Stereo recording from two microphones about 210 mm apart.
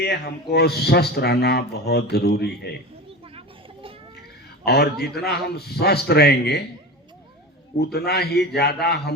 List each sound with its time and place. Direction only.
0.0 s speech: 50° left (ahead or behind)
3.1 s children playing: 25° right (ahead or behind)
4.6 s speech: 50° left (ahead or behind)
7.9 s speech: 50° left (ahead or behind)